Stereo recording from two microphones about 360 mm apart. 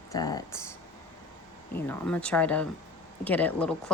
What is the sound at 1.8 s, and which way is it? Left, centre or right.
Speech, centre.